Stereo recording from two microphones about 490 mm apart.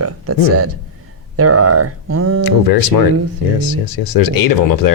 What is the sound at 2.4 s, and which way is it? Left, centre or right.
Speech, left.